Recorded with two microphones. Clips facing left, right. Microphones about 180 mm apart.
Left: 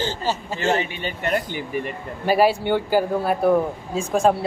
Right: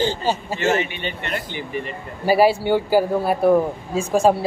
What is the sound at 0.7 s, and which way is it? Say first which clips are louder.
Speech: even; 40° left (ahead or behind).